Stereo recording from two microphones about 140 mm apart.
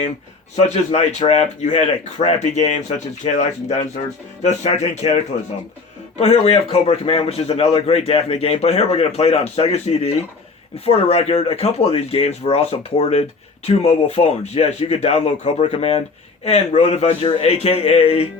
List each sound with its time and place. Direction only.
0.5 s speech: 50° left (ahead or behind)
3.2 s speech: 40° left (ahead or behind)
4.0 s speech: 60° left (ahead or behind)